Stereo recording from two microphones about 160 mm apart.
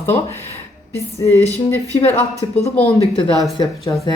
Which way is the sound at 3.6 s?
25° left (ahead or behind).